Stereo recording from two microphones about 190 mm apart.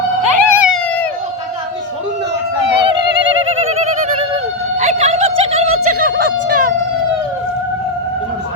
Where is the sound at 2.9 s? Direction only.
65° right (ahead or behind).